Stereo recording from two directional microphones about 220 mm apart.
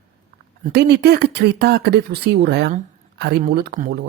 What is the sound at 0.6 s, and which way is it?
Speech, 45° right (ahead or behind).